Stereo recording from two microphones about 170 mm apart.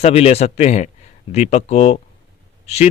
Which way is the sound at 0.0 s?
40° left (ahead or behind).